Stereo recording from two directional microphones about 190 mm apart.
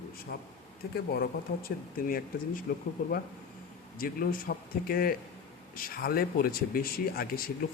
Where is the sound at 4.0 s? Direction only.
50° left (ahead or behind).